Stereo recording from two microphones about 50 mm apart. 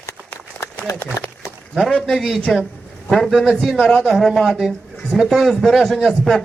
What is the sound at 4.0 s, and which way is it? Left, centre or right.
A man's voice, centre.